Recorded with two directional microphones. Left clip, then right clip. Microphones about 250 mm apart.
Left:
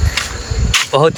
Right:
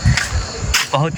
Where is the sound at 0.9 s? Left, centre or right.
Left.